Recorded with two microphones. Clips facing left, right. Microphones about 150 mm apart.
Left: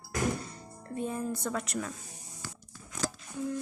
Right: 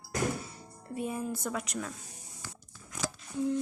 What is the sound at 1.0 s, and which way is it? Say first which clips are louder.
Speech: left 1 dB; 10° right (ahead or behind).